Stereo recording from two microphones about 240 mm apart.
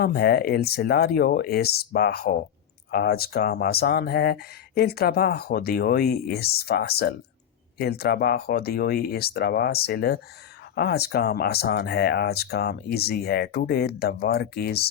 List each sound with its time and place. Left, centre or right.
0.0 s speech: left